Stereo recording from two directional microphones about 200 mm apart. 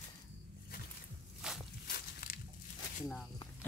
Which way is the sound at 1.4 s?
Centre (ahead or behind).